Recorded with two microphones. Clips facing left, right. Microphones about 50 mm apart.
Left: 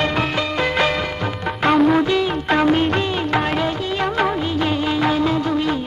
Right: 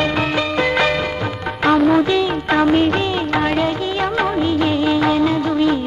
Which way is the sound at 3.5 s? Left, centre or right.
Centre.